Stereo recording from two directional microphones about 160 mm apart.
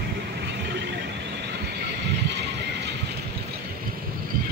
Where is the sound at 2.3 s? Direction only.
90° right.